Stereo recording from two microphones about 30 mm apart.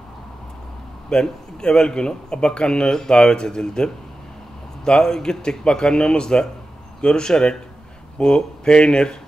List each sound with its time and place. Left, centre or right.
1.1 s speech: left